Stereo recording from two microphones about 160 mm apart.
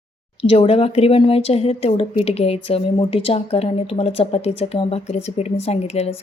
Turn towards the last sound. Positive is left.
turn(degrees=40)  # may be behind; listen again after turning